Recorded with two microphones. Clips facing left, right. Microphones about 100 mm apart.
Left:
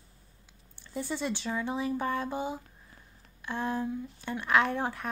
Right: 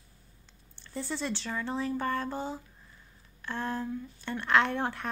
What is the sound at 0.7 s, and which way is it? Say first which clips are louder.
Speech: left 1 dB; 10° left (ahead or behind).